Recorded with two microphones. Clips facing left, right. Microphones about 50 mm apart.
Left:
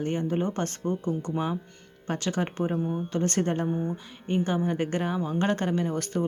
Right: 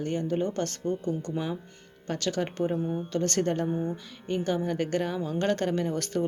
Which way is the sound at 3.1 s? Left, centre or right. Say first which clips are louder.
Even; centre.